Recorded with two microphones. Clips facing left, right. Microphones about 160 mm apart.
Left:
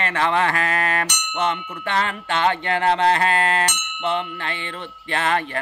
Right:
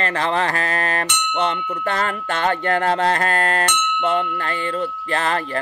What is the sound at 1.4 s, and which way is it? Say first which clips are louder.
Speech: right 1 dB; 40° right (ahead or behind).